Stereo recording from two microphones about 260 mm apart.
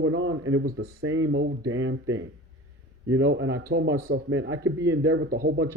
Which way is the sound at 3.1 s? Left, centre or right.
Right.